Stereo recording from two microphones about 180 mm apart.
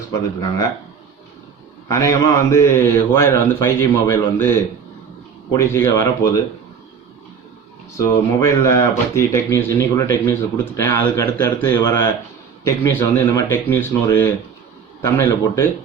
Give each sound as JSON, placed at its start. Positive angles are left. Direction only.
{"t": 0.1, "sound": "speech", "side_deg": 20}
{"t": 1.9, "sound": "speech", "side_deg": 15}
{"t": 5.5, "sound": "speech", "side_deg": 15}
{"t": 7.9, "sound": "speech", "side_deg": 15}